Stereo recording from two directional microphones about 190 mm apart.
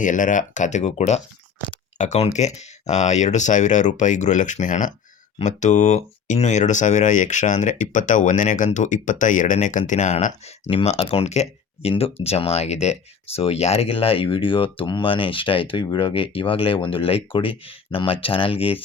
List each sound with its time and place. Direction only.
0.0 s speech: 40° left (ahead or behind)